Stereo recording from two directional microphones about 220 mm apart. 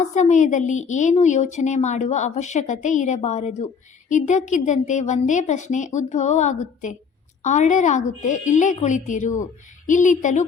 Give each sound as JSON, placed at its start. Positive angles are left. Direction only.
{"t": 0.0, "sound": "a woman's voice", "side_deg": 35}